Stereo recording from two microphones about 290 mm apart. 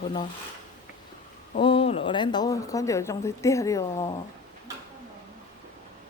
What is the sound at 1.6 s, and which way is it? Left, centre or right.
Speech, centre.